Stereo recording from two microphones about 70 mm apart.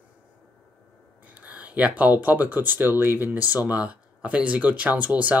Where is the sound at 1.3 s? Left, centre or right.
Right.